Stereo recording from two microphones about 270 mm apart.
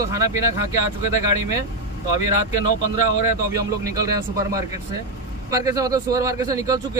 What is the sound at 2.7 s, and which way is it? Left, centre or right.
Speech, left.